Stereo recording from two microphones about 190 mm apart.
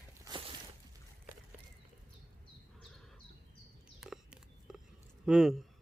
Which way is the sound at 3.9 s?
Centre (ahead or behind).